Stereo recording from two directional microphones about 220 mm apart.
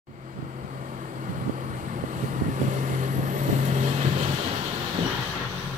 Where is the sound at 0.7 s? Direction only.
35° right (ahead or behind).